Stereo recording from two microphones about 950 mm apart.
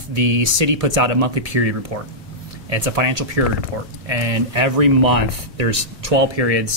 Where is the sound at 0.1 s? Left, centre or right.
Right.